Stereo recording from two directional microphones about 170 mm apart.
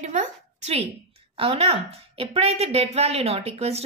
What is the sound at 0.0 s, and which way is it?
A woman's voice, 45° right (ahead or behind).